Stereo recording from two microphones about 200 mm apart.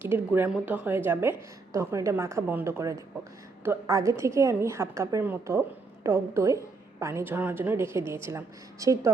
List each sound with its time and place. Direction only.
0.0 s a woman's voice: 10° right (ahead or behind)